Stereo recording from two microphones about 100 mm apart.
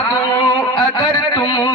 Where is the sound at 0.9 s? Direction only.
45° left (ahead or behind).